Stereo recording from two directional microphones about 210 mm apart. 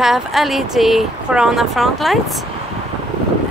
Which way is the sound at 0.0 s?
Centre (ahead or behind).